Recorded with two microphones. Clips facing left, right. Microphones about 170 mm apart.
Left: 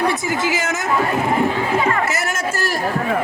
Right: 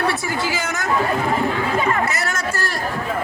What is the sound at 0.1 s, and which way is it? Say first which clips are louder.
Speech: left 3 dB; 20° left (ahead or behind).